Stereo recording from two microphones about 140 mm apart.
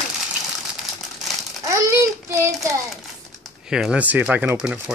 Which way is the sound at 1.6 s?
20° right (ahead or behind).